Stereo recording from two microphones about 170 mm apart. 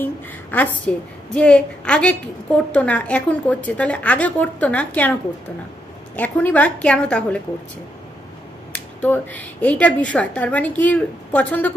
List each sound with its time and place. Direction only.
0.5 s a woman's voice: 10° left (ahead or behind)
6.1 s a woman's voice: 10° left (ahead or behind)
8.7 s a woman's voice: 10° left (ahead or behind)